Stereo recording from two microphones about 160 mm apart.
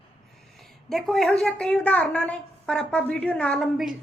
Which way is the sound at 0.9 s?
Centre (ahead or behind).